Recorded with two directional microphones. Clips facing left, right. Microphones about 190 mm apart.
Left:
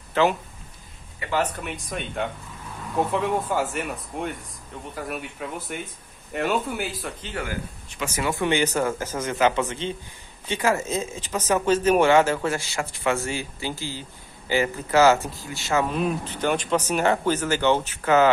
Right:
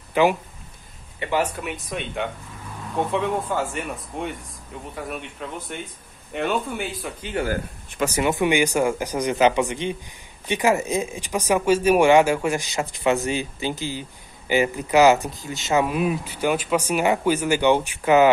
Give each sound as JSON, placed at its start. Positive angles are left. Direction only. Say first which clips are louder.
{"t": 0.1, "sound": "speech", "louder": "right 2 dB", "side_deg": -15}
{"t": 7.4, "sound": "speech", "louder": "right 6 dB", "side_deg": -40}
{"t": 8.2, "sound": "speech", "louder": "right 2 dB", "side_deg": -20}